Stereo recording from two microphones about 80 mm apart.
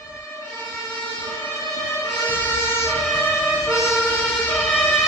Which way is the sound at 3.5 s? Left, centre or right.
Centre.